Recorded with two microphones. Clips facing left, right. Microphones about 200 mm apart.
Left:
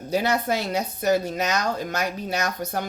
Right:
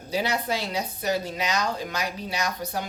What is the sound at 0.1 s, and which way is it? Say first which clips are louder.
Speech: left 4 dB; 50° left (ahead or behind).